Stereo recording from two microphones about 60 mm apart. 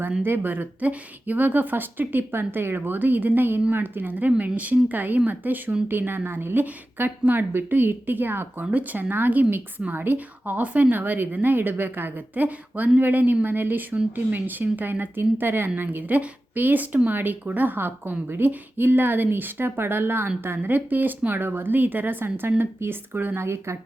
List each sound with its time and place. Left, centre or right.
0.2 s speech: right